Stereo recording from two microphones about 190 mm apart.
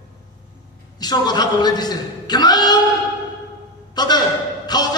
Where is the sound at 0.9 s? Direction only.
20° left (ahead or behind).